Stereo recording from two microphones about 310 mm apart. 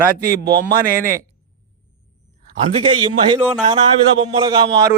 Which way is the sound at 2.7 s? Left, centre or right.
Centre.